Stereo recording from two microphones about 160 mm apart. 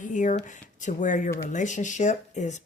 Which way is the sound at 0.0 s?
50° left (ahead or behind).